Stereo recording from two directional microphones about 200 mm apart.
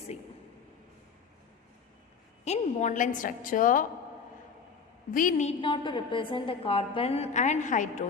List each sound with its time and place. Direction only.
2.4 s a woman's voice: 35° left (ahead or behind)
5.1 s a woman's voice: 40° left (ahead or behind)
5.5 s a woman's voice: 25° left (ahead or behind)